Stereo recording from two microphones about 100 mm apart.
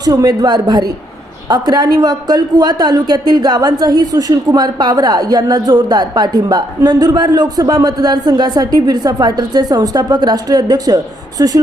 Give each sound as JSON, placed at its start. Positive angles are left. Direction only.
{"t": 0.0, "sound": "a woman's voice", "side_deg": -40}